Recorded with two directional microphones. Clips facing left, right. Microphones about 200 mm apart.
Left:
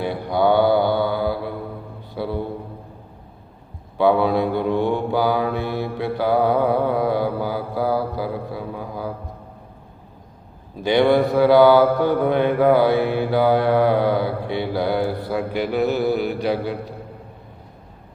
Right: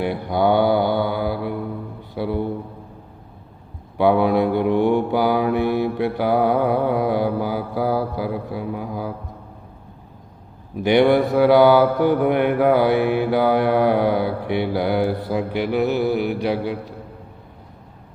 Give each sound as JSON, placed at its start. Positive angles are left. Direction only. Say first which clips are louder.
{"t": 0.0, "sound": "mantra", "louder": "even", "side_deg": -20}
{"t": 3.9, "sound": "mantra", "louder": "right 1 dB", "side_deg": -15}
{"t": 10.8, "sound": "mantra", "louder": "right 1 dB", "side_deg": -20}